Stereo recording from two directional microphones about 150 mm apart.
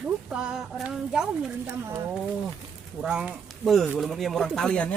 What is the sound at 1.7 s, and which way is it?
Speech, 15° right (ahead or behind).